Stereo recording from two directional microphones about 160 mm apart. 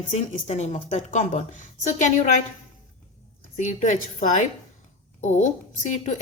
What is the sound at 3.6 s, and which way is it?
Speech, 50° left (ahead or behind).